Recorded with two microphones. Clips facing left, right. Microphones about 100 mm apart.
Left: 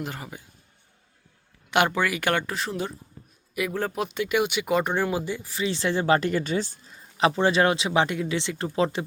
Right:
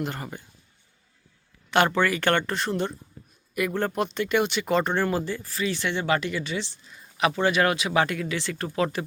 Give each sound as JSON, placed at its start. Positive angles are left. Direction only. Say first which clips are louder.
{"t": 0.0, "sound": "speech", "louder": "right 3 dB", "side_deg": 0}
{"t": 1.7, "sound": "speech", "louder": "right 1 dB", "side_deg": 15}